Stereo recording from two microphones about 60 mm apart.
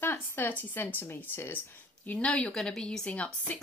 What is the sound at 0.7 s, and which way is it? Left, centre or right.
Speech, left.